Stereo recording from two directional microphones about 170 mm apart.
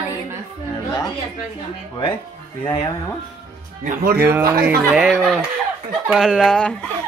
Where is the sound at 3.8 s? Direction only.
60° right (ahead or behind).